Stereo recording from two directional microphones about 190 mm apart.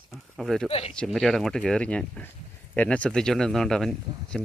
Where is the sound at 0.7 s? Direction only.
30° left (ahead or behind).